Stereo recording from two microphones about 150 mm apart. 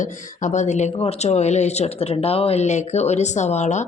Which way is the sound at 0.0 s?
55° left (ahead or behind).